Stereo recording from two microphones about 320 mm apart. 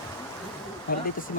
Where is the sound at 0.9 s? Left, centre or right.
Left.